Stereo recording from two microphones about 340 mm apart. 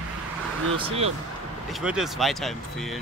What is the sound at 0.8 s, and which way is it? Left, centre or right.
Speech, centre.